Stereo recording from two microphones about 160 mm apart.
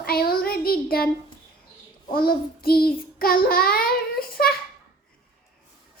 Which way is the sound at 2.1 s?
70° left (ahead or behind).